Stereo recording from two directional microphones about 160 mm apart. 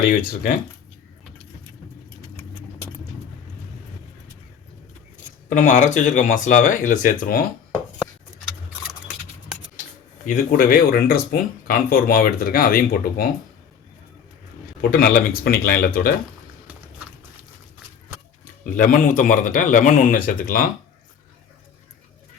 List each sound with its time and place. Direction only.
0.0 s speech: 65° left (ahead or behind)
5.5 s speech: 50° left (ahead or behind)
10.2 s speech: 60° left (ahead or behind)
14.8 s speech: 65° left (ahead or behind)
18.8 s speech: 55° left (ahead or behind)